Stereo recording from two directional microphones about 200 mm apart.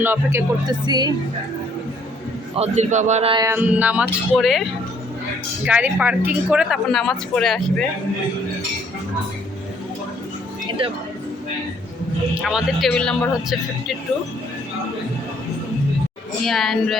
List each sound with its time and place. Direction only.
0.0 s speech: 10° right (ahead or behind)
2.6 s a man's voice: 35° right (ahead or behind)
3.4 s speech: 10° right (ahead or behind)
5.6 s a woman's voice: 10° right (ahead or behind)
10.7 s speech: 25° right (ahead or behind)
12.3 s a woman's voice: 5° right (ahead or behind)
16.5 s a woman's voice: centre (ahead or behind)